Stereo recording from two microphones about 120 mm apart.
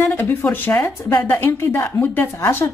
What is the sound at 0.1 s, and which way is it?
A woman's voice, 15° left (ahead or behind).